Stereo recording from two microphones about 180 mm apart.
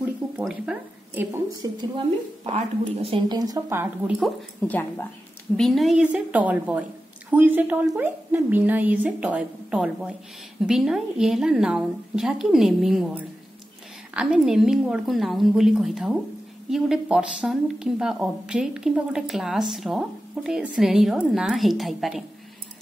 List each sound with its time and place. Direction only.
0.4 s speech: 5° right (ahead or behind)
1.6 s a woman's voice: 25° right (ahead or behind); by 4.3 s 5° right (ahead or behind)
4.6 s speech: 10° left (ahead or behind)
5.6 s a woman's voice: centre (ahead or behind)